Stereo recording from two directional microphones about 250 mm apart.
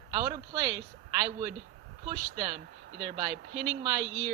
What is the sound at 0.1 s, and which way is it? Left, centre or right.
A woman's voice, centre.